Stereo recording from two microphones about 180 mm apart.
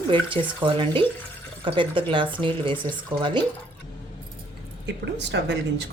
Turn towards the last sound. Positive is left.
turn(degrees=-75)  # may be behind; listen again after turning